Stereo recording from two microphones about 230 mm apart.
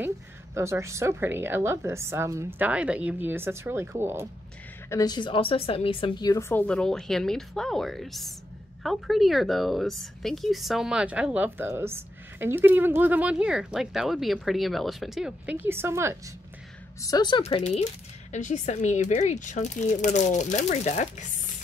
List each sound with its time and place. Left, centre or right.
0.6 s a woman's voice: centre
4.8 s a woman's voice: centre
17.0 s speech: centre